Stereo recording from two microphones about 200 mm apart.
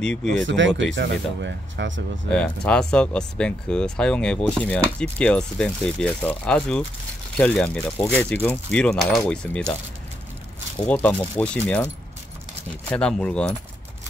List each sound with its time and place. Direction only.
0.0 s speech: 5° left (ahead or behind)
0.6 s speech: 65° right (ahead or behind)
2.3 s speech: 5° left (ahead or behind)
10.9 s speech: 5° left (ahead or behind)
12.9 s speech: 5° left (ahead or behind)